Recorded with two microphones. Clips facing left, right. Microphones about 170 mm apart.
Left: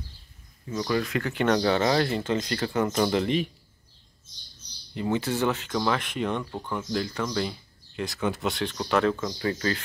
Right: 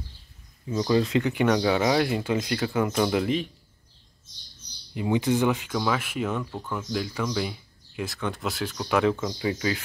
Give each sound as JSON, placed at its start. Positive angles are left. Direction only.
{"t": 0.7, "sound": "speech", "side_deg": -20}
{"t": 1.3, "sound": "speech", "side_deg": -10}
{"t": 4.9, "sound": "speech", "side_deg": -15}